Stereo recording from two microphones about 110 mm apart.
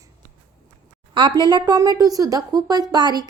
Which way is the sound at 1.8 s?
35° right (ahead or behind).